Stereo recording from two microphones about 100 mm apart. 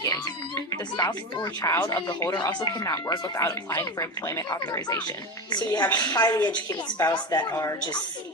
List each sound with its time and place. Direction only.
0.7 s speech: 40° left (ahead or behind)
2.3 s a woman's voice: 50° left (ahead or behind)
2.8 s a woman's voice: 35° left (ahead or behind)